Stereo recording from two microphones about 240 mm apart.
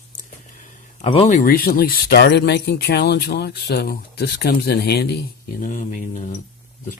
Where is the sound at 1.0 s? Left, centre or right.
Left.